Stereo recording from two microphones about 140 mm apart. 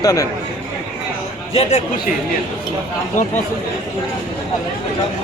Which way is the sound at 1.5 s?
50° left (ahead or behind).